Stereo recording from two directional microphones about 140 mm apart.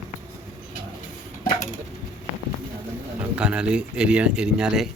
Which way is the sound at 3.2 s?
10° right (ahead or behind).